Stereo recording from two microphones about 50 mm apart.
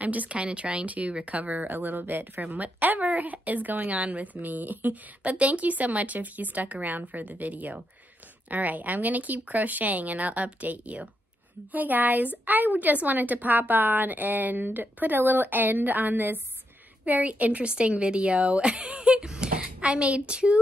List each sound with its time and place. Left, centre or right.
0.0 s speech: right